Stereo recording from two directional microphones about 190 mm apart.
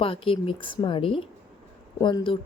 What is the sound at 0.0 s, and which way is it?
Speech, 30° left (ahead or behind).